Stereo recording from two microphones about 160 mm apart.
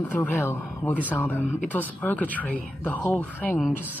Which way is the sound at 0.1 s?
15° left (ahead or behind).